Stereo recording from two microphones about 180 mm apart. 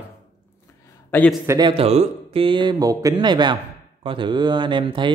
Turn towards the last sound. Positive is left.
turn(degrees=-30)  # may be behind; listen again after turning